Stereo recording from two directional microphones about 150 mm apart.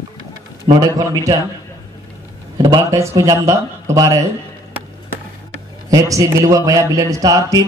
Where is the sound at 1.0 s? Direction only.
25° right (ahead or behind).